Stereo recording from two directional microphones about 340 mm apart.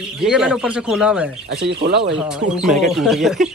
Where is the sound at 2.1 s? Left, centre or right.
Centre.